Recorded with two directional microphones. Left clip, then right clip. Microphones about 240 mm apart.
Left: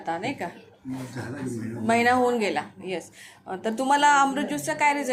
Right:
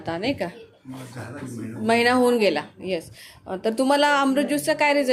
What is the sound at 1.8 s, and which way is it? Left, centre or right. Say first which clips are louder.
Speech: right 2 dB; right.